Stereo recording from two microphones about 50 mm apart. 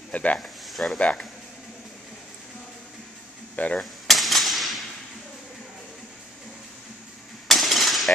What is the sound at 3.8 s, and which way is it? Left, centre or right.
Cap gun, centre.